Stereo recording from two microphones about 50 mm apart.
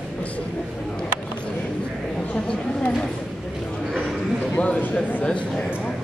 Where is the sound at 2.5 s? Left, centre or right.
Centre.